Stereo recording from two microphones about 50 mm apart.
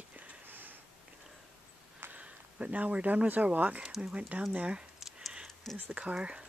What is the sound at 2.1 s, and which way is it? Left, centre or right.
Speech, right.